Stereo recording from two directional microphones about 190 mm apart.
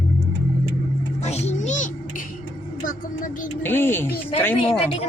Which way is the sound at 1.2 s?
35° left (ahead or behind).